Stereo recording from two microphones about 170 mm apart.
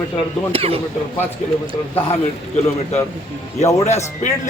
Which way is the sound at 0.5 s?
35° right (ahead or behind).